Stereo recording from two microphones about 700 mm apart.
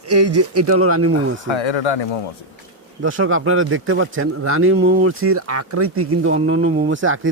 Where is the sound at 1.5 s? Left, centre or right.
Left.